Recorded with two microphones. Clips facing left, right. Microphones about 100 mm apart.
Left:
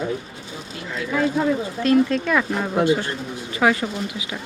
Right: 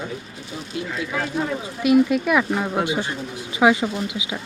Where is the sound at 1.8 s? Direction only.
10° right (ahead or behind).